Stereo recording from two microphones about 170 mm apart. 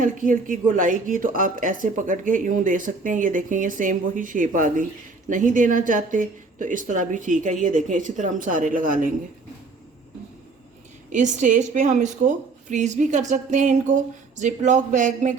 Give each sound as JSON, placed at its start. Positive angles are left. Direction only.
{"t": 0.0, "sound": "speech", "side_deg": -50}
{"t": 11.1, "sound": "speech", "side_deg": -45}